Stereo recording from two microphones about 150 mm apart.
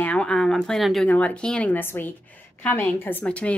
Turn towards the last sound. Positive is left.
turn(degrees=10)  # may be behind; listen again after turning